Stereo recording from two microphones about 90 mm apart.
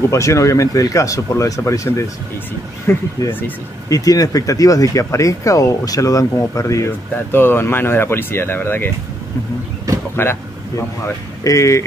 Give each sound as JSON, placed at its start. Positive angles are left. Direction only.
{"t": 0.1, "sound": "speech", "side_deg": 35}
{"t": 3.9, "sound": "speech", "side_deg": 40}
{"t": 7.2, "sound": "speech", "side_deg": 25}
{"t": 10.2, "sound": "speech", "side_deg": 20}
{"t": 11.4, "sound": "speech", "side_deg": 35}